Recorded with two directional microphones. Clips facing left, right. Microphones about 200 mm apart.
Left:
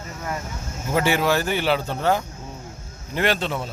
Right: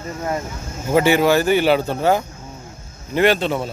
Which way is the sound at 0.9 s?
5° right (ahead or behind).